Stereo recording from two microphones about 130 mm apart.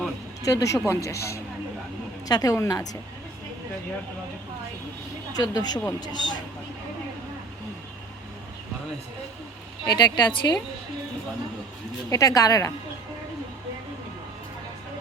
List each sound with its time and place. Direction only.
0.4 s speech: 25° left (ahead or behind)
5.3 s a woman's voice: 30° left (ahead or behind)
9.8 s a woman's voice: 35° left (ahead or behind)
12.1 s speech: 25° left (ahead or behind)